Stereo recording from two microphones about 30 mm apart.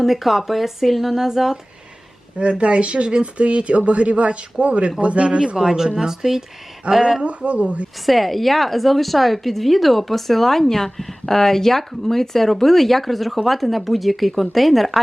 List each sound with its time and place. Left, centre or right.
0.0 s a woman's voice: centre
2.4 s a man's voice: right
5.5 s speech: centre
6.8 s a man's voice: right
8.0 s a woman's voice: centre